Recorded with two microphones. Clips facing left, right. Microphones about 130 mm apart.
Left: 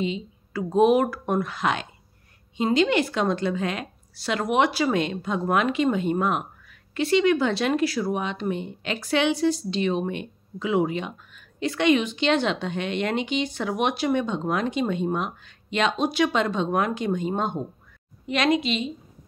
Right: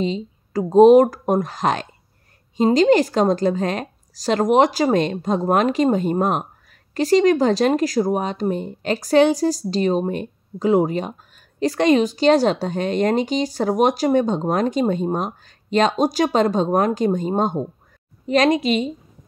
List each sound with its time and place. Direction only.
0.0 s a woman's voice: 40° right (ahead or behind)